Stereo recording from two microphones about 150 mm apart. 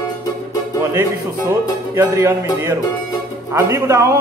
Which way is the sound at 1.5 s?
20° right (ahead or behind).